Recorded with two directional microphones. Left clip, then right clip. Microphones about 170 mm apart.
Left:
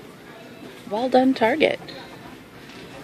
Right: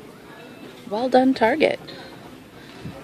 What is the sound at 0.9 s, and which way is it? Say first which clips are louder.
Speech: right 1 dB; 10° right (ahead or behind).